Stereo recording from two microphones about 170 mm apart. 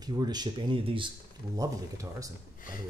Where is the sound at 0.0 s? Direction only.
25° right (ahead or behind).